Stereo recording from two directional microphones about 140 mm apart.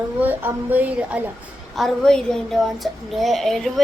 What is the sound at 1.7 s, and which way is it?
Speech, 5° left (ahead or behind).